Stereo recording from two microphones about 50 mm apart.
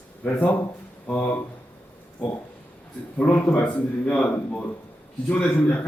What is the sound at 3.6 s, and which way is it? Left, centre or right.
Speech, left.